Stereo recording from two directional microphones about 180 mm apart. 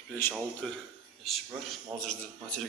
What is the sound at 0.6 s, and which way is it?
A man's voice, centre (ahead or behind).